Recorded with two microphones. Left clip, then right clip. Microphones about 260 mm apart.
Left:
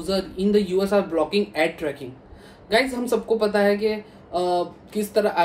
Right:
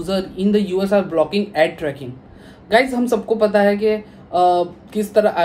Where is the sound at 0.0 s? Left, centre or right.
Centre.